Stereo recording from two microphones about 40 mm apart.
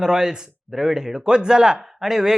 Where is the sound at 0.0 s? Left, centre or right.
Centre.